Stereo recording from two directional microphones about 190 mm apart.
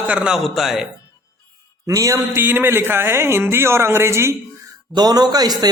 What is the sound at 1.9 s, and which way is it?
A man's voice, 15° right (ahead or behind).